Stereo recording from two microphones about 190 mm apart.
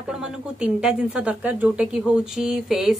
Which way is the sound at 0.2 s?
5° right (ahead or behind).